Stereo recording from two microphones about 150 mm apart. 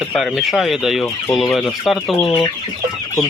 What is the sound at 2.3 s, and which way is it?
Chicken, 30° left (ahead or behind).